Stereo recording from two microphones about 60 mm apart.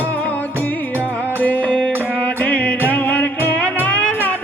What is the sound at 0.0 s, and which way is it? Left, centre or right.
Music, left.